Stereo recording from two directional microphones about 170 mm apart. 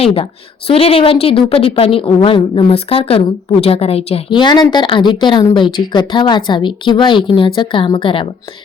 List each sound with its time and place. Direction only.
0.0 s a woman's voice: 35° left (ahead or behind)